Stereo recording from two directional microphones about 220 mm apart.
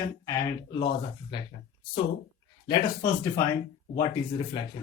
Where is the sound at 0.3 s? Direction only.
20° left (ahead or behind).